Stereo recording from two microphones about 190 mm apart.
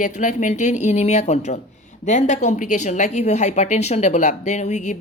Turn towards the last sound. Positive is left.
turn(degrees=40)  # may be behind; listen again after turning